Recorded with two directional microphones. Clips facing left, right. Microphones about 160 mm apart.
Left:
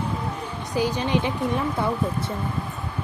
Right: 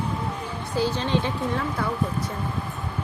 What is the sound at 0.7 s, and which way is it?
Speech, 15° left (ahead or behind).